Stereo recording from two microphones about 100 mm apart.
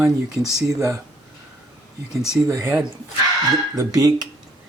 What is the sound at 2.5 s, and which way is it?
Speech, 30° right (ahead or behind).